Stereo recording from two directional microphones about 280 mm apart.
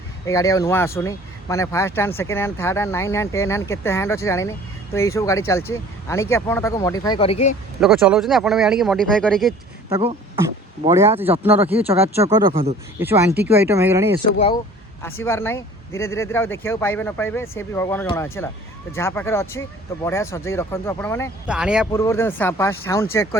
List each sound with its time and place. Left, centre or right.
0.3 s speech: centre
7.8 s speech: centre
9.9 s speech: right
10.8 s speech: centre
13.0 s speech: centre
14.3 s speech: centre
15.0 s speech: centre
21.4 s speech: centre
21.9 s speech: centre